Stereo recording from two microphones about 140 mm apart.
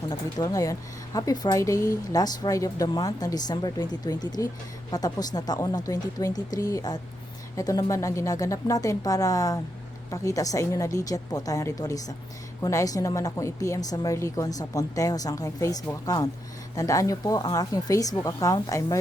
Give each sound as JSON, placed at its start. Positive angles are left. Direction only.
{"t": 0.1, "sound": "speech", "side_deg": 30}